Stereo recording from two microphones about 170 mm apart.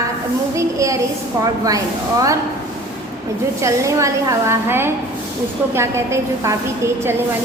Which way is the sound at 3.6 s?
20° right (ahead or behind).